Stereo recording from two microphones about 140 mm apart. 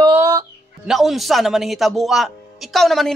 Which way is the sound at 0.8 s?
Centre (ahead or behind).